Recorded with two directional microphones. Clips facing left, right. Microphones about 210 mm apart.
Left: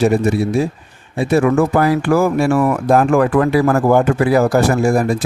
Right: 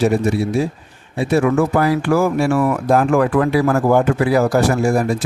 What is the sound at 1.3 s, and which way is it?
Speech, 50° left (ahead or behind).